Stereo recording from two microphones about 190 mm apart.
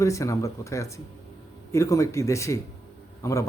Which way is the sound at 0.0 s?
15° left (ahead or behind).